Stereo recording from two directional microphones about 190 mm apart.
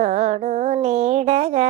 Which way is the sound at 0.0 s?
40° right (ahead or behind).